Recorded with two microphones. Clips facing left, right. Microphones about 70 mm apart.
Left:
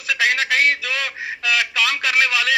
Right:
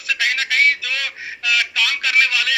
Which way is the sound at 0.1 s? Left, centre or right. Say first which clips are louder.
Left 2 dB; left.